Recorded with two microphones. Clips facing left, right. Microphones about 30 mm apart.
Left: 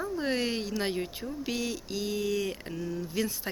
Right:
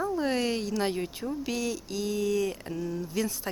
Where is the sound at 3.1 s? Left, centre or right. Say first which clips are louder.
Even; centre.